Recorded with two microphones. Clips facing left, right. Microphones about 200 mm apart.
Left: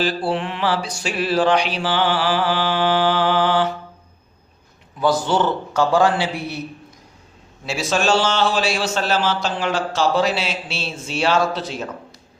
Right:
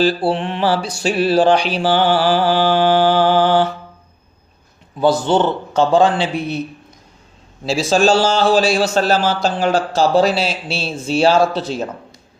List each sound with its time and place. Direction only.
0.0 s a man's voice: 30° right (ahead or behind)
4.9 s a man's voice: 25° right (ahead or behind)
7.6 s a man's voice: 30° right (ahead or behind)